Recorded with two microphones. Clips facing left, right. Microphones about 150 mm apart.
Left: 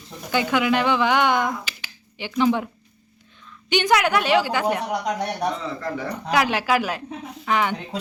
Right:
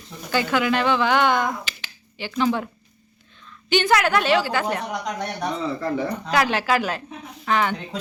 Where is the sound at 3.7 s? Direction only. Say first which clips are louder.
Even; 15° left (ahead or behind).